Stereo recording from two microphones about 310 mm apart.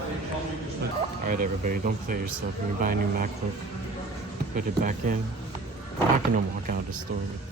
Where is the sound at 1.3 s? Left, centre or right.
Right.